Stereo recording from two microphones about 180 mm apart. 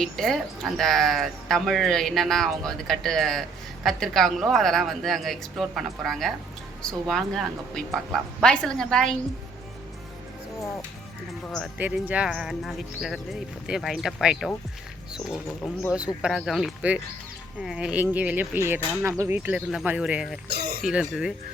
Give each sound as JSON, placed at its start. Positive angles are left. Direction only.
{"t": 0.0, "sound": "speech", "side_deg": 0}
{"t": 11.8, "sound": "speech", "side_deg": -10}
{"t": 15.9, "sound": "speech", "side_deg": -5}
{"t": 20.5, "sound": "a sound", "side_deg": -60}
{"t": 20.8, "sound": "speech", "side_deg": -5}